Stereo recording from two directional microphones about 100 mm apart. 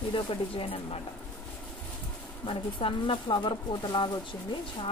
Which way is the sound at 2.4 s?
60° left (ahead or behind).